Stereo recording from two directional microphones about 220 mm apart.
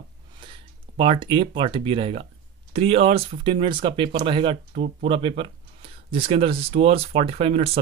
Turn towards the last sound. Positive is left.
turn(degrees=-30)  # may be behind; listen again after turning